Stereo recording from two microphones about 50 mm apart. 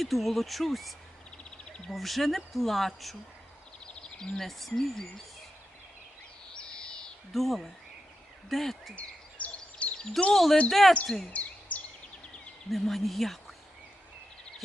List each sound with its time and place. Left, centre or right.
0.0 s speech: centre
3.8 s a sound: centre
4.4 s speech: centre
6.5 s a sound: centre
7.3 s speech: centre
9.0 s a sound: left
10.3 s speech: centre
11.3 s bird vocalization: left
12.7 s speech: centre